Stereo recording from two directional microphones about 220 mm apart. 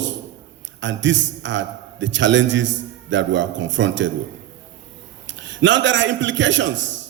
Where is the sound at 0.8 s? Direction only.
55° right (ahead or behind).